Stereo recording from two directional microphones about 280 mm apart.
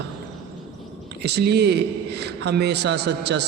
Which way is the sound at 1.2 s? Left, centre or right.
Right.